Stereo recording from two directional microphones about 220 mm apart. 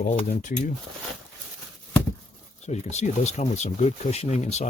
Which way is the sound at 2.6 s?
30° left (ahead or behind).